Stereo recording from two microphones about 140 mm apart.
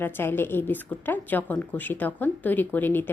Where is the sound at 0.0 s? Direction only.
15° left (ahead or behind).